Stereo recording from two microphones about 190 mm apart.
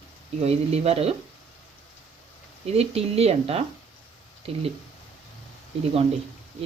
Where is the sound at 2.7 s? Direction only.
35° right (ahead or behind).